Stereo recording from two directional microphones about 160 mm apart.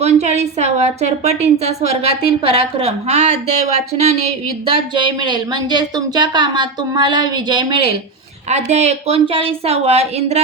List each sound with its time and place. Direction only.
0.0 s a woman's voice: 45° right (ahead or behind)
4.6 s speech: 30° right (ahead or behind)
8.4 s a woman's voice: 45° right (ahead or behind)